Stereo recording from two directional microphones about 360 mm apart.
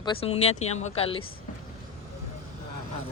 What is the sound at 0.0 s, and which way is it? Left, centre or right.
Speech, centre.